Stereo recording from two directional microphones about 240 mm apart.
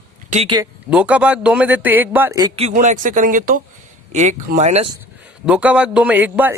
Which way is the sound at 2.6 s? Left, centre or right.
Right.